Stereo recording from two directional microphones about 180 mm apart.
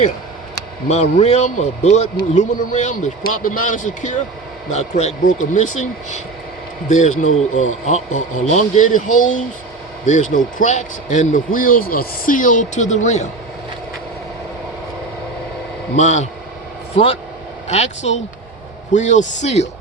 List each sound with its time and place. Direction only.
0.9 s speech: 40° left (ahead or behind)
16.0 s speech: 40° left (ahead or behind)